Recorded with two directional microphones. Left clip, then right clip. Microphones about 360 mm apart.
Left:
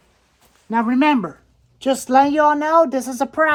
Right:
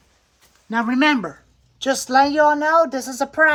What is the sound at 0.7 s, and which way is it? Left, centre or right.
Speech, centre.